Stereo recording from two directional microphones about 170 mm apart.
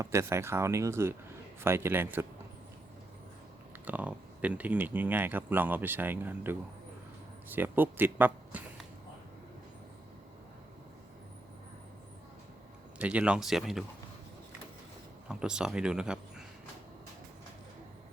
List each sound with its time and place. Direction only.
0.0 s speech: 15° right (ahead or behind)
3.8 s speech: 10° right (ahead or behind)
13.0 s speech: 5° right (ahead or behind)
15.3 s speech: 5° right (ahead or behind)